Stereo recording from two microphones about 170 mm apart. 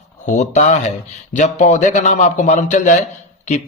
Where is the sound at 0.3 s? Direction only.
45° left (ahead or behind).